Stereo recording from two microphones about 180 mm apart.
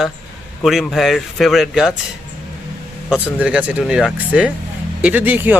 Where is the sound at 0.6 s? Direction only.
Centre (ahead or behind).